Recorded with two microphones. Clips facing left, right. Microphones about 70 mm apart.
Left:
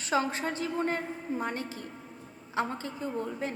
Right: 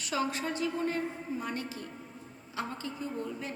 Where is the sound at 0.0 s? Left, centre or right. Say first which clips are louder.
Left 3 dB; left.